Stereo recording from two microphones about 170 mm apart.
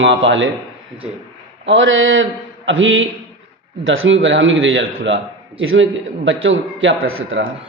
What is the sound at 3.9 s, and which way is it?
A man's voice, 90° right.